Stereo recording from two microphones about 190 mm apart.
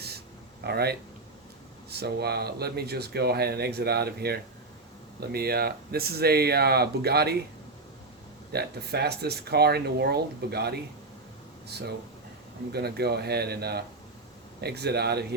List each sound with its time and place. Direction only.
0.6 s speech: 55° right (ahead or behind)
8.5 s speech: 60° right (ahead or behind)